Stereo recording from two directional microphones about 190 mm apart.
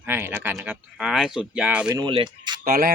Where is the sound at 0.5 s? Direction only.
5° right (ahead or behind).